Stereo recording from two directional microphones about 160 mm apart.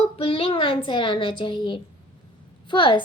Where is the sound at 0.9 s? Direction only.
30° left (ahead or behind).